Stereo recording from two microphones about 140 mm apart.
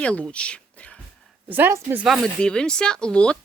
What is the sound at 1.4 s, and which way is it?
Speech, 15° right (ahead or behind).